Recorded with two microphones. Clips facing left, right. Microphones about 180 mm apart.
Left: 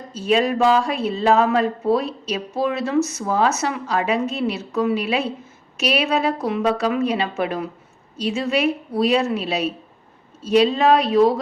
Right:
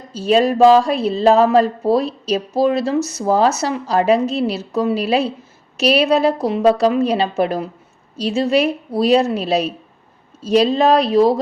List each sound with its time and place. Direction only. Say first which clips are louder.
0.1 s speech: right 4 dB; 35° right (ahead or behind)